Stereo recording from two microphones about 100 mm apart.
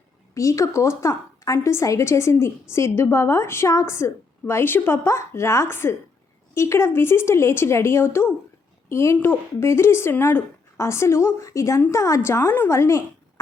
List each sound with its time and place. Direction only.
0.3 s a woman's voice: 30° left (ahead or behind)